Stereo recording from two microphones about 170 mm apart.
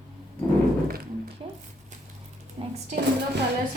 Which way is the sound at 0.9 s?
60° right (ahead or behind).